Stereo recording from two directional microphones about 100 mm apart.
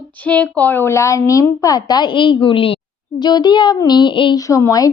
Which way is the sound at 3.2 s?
45° left (ahead or behind).